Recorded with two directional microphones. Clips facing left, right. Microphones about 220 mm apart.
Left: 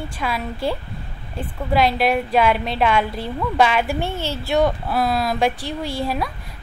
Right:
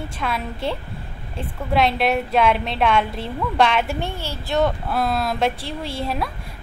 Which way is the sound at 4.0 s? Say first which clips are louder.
Left 3 dB; 10° right (ahead or behind).